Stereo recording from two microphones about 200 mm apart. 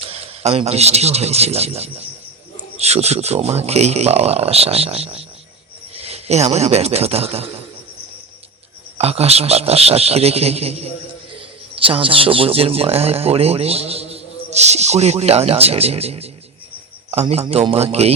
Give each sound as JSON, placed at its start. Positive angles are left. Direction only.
{"t": 0.0, "sound": "speech", "side_deg": -30}
{"t": 9.0, "sound": "speech", "side_deg": -30}